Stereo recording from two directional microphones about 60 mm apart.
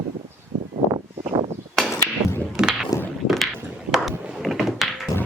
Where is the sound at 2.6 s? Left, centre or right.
Centre.